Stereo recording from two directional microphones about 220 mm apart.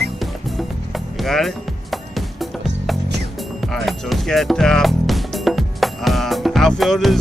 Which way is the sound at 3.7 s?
Centre (ahead or behind).